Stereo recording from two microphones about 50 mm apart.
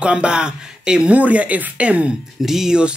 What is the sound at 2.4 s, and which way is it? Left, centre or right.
Speech, centre.